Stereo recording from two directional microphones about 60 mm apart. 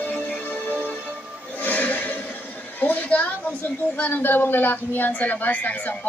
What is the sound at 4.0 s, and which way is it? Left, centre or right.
A woman's voice, left.